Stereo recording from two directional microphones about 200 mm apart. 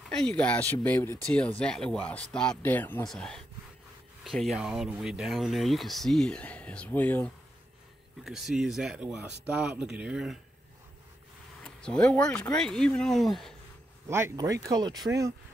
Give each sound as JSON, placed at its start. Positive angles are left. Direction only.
{"t": 0.1, "sound": "speech", "side_deg": 5}
{"t": 11.6, "sound": "speech", "side_deg": 5}
{"t": 14.0, "sound": "speech", "side_deg": -15}